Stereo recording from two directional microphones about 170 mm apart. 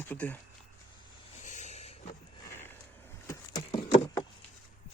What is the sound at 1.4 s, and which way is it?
Vehicle, 45° left (ahead or behind).